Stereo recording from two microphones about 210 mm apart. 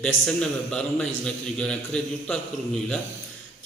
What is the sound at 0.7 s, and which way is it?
A man's voice, 5° left (ahead or behind).